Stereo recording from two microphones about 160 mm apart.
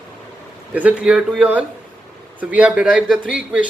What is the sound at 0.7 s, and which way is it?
A man's voice, 10° right (ahead or behind).